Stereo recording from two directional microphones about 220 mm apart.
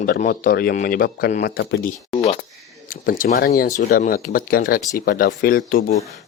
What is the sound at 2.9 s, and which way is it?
Speech, 40° left (ahead or behind).